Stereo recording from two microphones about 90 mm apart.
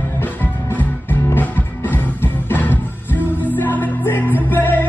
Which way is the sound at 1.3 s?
20° left (ahead or behind).